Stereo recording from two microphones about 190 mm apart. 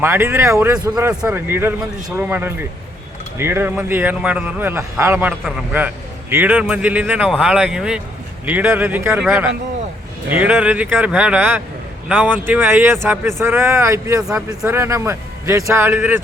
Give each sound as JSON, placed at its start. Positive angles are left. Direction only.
{"t": 0.0, "sound": "a man's voice", "side_deg": -10}